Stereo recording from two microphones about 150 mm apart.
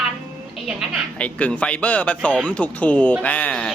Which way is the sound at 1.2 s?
10° left (ahead or behind).